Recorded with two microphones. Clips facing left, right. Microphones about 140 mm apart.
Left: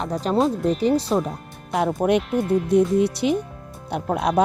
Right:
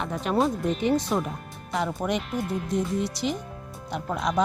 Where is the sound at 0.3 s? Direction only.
Centre (ahead or behind).